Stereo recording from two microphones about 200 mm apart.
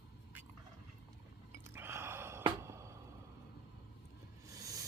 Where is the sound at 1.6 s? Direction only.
10° right (ahead or behind).